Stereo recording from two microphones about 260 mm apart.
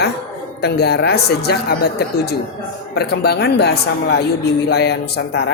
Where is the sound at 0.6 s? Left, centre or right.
Left.